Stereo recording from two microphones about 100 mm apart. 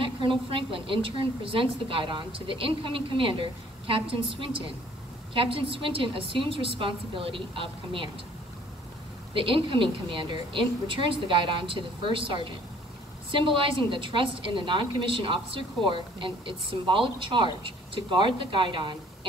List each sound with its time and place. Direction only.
0.0 s a woman's voice: 60° right (ahead or behind)
9.3 s a woman's voice: 60° right (ahead or behind)